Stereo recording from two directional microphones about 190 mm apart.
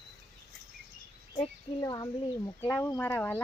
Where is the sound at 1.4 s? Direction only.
20° left (ahead or behind).